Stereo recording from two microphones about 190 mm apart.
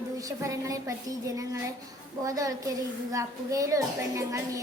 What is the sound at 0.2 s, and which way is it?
A woman's voice, 15° right (ahead or behind).